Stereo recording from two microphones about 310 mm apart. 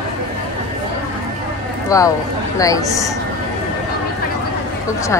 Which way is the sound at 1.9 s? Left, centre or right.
Centre.